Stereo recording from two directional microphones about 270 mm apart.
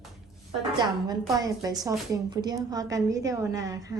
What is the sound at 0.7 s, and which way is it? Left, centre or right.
A woman's voice, centre.